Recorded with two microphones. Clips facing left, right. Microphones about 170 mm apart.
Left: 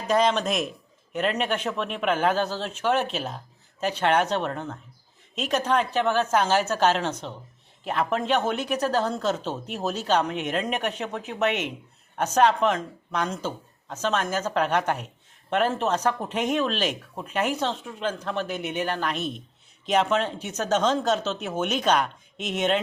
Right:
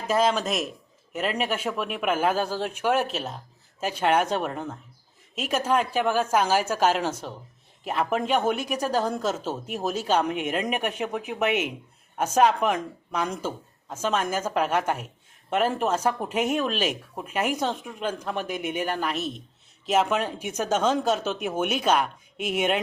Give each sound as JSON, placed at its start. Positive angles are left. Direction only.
{"t": 0.1, "sound": "speech", "side_deg": -5}